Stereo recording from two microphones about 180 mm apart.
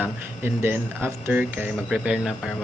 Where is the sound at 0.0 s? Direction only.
10° right (ahead or behind).